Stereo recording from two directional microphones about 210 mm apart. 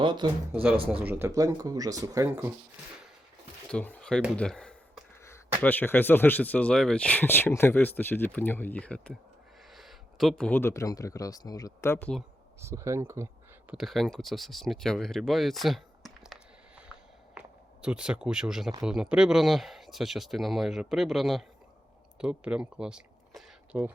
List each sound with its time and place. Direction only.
0.0 s speech: 20° right (ahead or behind)
3.7 s speech: 5° left (ahead or behind)
12.5 s speech: 15° right (ahead or behind)
13.7 s a sound: centre (ahead or behind)
17.8 s speech: 5° right (ahead or behind)